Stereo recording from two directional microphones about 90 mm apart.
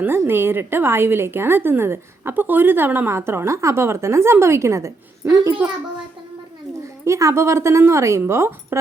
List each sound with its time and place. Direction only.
0.0 s a woman's voice: 25° right (ahead or behind)
7.0 s a woman's voice: 35° right (ahead or behind)